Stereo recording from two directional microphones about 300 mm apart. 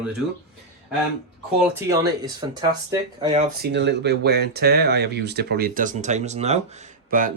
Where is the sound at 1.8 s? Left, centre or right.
Centre.